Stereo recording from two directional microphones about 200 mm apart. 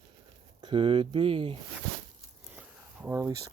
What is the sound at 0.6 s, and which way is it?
Speech, 25° right (ahead or behind).